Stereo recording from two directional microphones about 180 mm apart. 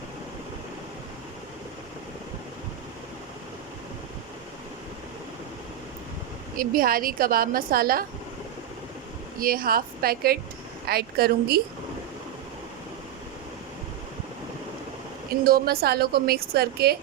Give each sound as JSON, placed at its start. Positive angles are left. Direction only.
{"t": 6.6, "sound": "a woman's voice", "side_deg": -55}
{"t": 9.4, "sound": "a woman's voice", "side_deg": -55}
{"t": 15.3, "sound": "a woman's voice", "side_deg": -55}